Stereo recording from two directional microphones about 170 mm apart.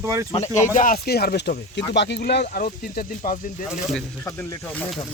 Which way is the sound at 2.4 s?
60° left (ahead or behind).